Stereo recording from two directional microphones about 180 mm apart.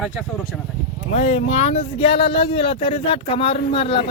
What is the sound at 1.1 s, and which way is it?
Speech, 35° left (ahead or behind).